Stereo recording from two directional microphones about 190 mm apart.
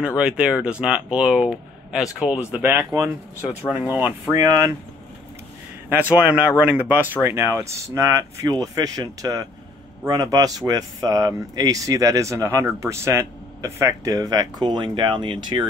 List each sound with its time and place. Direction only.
0.0 s speech: 5° right (ahead or behind)
5.9 s speech: 10° right (ahead or behind); by 15.6 s 25° right (ahead or behind)